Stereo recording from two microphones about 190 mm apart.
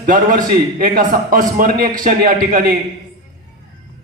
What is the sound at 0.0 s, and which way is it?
A man's voice, 45° right (ahead or behind).